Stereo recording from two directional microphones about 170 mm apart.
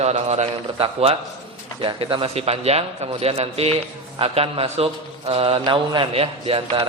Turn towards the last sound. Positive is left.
turn(degrees=-30)  # may be behind; listen again after turning